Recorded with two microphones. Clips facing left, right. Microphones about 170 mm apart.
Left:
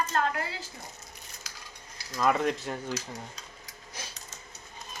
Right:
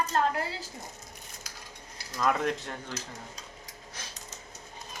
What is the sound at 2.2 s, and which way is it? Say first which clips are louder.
Speech: left 2 dB; 5° left (ahead or behind).